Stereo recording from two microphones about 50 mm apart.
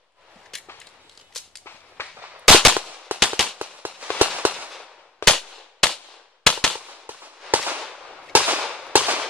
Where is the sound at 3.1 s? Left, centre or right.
Right.